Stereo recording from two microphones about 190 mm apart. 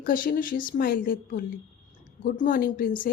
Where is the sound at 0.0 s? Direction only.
45° left (ahead or behind).